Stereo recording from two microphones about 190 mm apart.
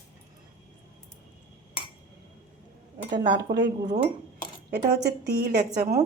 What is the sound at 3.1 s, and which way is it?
Speech, 20° right (ahead or behind).